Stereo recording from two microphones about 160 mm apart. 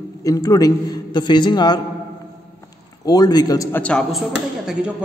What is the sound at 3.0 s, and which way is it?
Speech, 25° left (ahead or behind).